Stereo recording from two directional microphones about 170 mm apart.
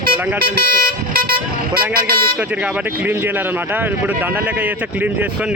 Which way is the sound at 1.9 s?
60° right (ahead or behind).